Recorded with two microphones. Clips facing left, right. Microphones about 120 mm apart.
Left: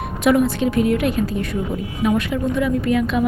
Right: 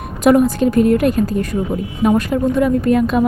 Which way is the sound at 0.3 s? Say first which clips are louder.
Right 4 dB; 45° right (ahead or behind).